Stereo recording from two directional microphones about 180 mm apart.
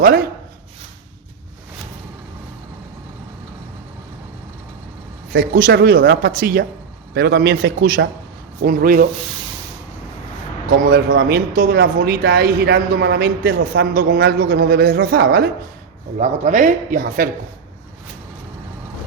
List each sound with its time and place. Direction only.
0.0 s speech: 55° right (ahead or behind)
5.3 s a man's voice: 60° right (ahead or behind)
10.7 s speech: 55° right (ahead or behind)
16.1 s a man's voice: 40° right (ahead or behind)